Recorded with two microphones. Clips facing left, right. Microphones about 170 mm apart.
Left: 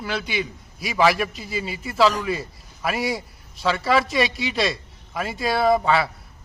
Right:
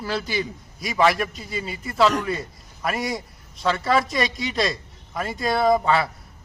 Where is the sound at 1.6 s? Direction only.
25° left (ahead or behind).